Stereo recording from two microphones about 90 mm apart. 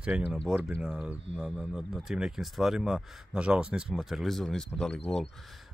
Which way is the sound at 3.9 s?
5° right (ahead or behind).